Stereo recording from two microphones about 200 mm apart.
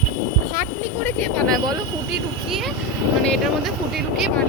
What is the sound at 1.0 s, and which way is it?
Speech, 5° left (ahead or behind).